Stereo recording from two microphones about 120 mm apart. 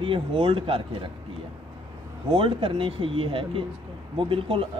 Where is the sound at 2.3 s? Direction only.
45° right (ahead or behind).